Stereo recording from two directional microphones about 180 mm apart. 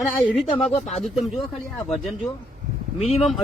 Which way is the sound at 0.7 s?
35° left (ahead or behind).